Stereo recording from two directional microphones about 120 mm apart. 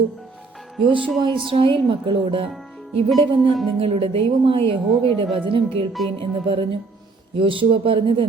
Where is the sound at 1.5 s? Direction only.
45° right (ahead or behind).